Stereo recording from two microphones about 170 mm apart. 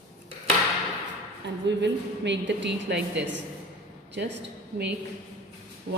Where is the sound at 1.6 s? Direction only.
90° right.